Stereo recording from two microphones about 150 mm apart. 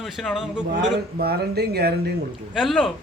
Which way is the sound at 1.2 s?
90° right.